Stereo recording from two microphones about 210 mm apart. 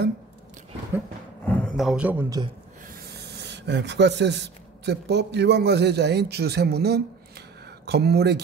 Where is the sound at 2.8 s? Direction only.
45° right (ahead or behind).